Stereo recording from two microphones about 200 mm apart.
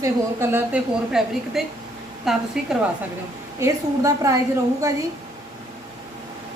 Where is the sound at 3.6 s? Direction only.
15° right (ahead or behind).